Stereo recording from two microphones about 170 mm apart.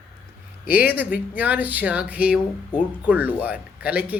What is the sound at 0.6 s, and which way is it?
Speech, 60° left (ahead or behind).